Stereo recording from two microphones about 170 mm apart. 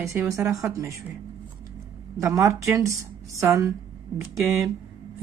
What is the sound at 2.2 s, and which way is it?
A woman's voice, 15° right (ahead or behind).